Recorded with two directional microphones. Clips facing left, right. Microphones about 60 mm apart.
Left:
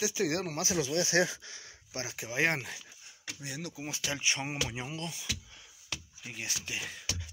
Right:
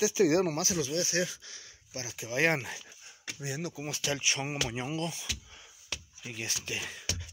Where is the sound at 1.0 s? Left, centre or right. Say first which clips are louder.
Left 4 dB; left.